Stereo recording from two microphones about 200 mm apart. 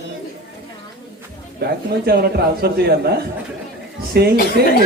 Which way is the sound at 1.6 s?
50° right (ahead or behind).